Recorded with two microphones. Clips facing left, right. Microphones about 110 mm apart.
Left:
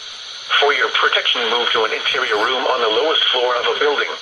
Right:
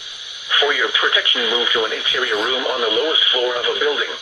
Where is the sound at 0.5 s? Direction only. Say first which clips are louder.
Left 3 dB; 55° left (ahead or behind).